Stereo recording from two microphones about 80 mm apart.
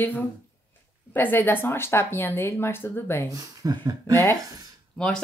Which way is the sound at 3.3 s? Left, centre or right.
Right.